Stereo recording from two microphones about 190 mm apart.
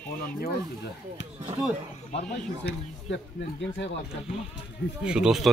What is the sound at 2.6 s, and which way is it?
Speech, 75° left (ahead or behind).